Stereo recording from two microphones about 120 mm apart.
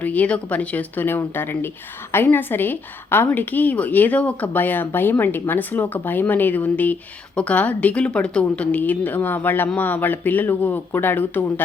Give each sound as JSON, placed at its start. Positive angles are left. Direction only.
{"t": 0.0, "sound": "a woman's voice", "side_deg": 10}